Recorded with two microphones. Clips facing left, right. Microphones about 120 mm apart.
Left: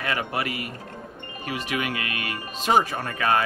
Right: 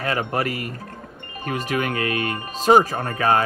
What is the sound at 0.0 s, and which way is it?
Speech, 35° right (ahead or behind).